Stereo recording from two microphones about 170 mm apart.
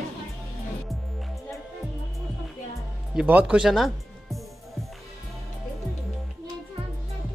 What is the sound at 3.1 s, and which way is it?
Speech, 10° right (ahead or behind).